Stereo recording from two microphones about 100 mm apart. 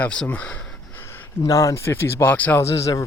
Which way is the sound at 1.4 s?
35° left (ahead or behind).